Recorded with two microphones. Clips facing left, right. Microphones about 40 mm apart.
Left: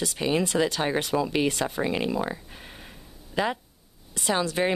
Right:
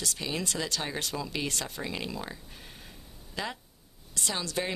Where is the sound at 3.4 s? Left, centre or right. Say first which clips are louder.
Left 9 dB; left.